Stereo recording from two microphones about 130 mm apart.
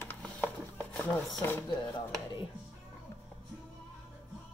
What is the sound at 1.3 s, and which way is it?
Speech, 20° left (ahead or behind).